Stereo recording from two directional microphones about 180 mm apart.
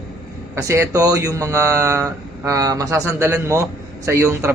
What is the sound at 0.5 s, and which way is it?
A man's voice, 15° right (ahead or behind).